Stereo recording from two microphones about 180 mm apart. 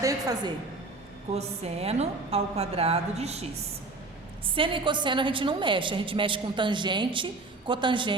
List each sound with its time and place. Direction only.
0.0 s a sound: 20° right (ahead or behind)
1.3 s a woman's voice: 35° right (ahead or behind)
4.4 s a woman's voice: 30° right (ahead or behind)